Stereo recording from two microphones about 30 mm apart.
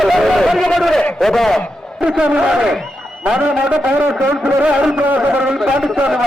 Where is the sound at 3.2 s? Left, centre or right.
Right.